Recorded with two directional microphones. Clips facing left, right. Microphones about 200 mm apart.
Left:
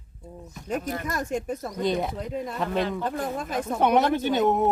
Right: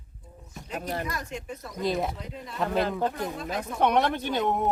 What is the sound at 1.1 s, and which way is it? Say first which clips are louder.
Speech: left 7 dB; 45° left (ahead or behind).